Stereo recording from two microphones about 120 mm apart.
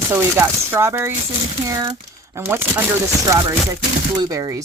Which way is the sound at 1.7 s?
30° right (ahead or behind).